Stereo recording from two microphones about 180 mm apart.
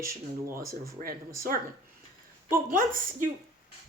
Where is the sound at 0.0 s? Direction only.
15° right (ahead or behind).